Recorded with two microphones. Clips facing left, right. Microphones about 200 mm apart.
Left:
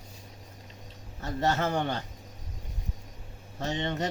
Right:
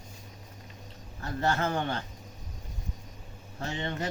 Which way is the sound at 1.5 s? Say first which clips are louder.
Left 1 dB; 20° left (ahead or behind).